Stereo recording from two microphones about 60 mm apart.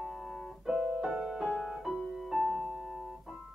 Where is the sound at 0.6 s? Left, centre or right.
Centre.